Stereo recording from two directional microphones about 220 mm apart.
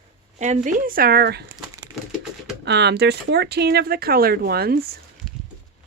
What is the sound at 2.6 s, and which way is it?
Speech, 50° right (ahead or behind).